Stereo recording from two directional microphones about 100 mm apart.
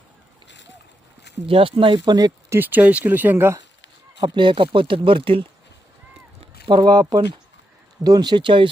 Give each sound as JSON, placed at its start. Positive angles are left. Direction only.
{"t": 1.5, "sound": "speech", "side_deg": -65}
{"t": 2.5, "sound": "speech", "side_deg": -20}
{"t": 4.2, "sound": "speech", "side_deg": -55}
{"t": 6.4, "sound": "speech", "side_deg": -50}